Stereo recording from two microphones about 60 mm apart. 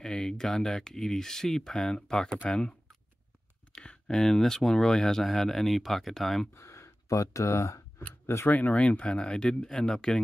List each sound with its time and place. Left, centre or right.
0.0 s speech: centre
2.5 s computer keyboard: centre
3.7 s a sound: centre
4.2 s speech: centre
6.5 s speech: left
8.5 s speech: left